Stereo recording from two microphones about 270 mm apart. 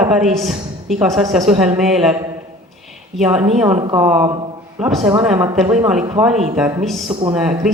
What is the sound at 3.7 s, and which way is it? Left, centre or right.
Speech, centre.